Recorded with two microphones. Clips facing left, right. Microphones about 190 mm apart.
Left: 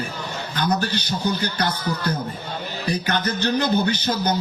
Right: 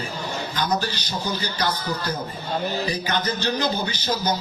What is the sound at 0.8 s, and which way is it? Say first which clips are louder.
A man's voice: left 4 dB; 60° left (ahead or behind).